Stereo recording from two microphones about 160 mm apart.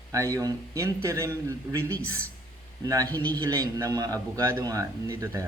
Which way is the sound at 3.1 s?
10° left (ahead or behind).